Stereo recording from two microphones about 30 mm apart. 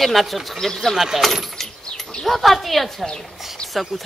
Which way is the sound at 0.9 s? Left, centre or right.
Centre.